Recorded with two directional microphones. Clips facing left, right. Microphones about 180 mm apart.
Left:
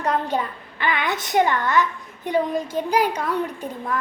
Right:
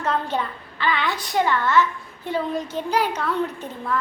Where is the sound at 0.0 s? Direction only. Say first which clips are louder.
Left 1 dB; 15° left (ahead or behind).